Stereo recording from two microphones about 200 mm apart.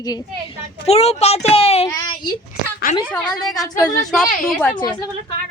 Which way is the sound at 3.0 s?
5° left (ahead or behind).